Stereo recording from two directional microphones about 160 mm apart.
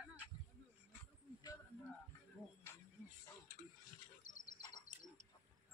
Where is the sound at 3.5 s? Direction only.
65° right (ahead or behind).